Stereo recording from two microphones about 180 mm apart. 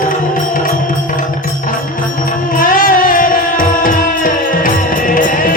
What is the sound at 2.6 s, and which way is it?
Music, 50° left (ahead or behind).